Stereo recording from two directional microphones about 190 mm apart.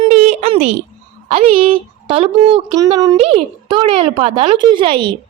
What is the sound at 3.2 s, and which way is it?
Speech, 30° right (ahead or behind).